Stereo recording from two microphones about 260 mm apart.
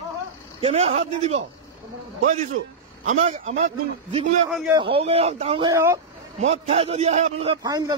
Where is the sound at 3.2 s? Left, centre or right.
Right.